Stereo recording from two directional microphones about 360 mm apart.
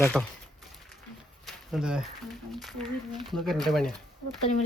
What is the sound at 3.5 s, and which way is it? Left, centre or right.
Speech, centre.